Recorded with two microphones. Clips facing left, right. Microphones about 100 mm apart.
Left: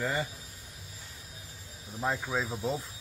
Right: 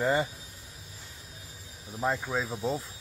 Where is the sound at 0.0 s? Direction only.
20° right (ahead or behind).